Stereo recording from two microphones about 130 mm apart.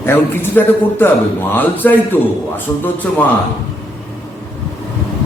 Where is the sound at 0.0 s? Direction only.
15° left (ahead or behind).